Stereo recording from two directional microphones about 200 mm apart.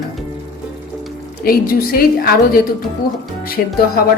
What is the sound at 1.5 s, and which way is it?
Dishes, 50° left (ahead or behind).